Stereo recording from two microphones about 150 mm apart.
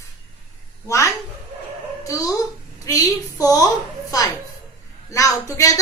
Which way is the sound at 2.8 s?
20° left (ahead or behind).